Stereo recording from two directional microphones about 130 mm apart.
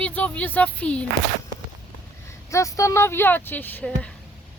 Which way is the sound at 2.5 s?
25° left (ahead or behind).